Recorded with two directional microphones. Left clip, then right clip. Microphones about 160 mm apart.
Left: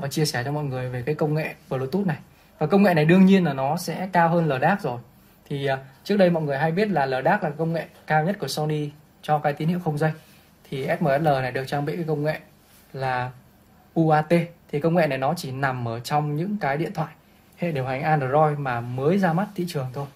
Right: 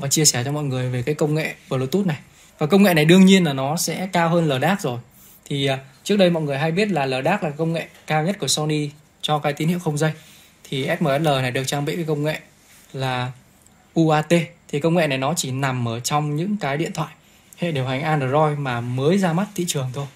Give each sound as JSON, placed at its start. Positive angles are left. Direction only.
{"t": 0.0, "sound": "speech", "side_deg": -55}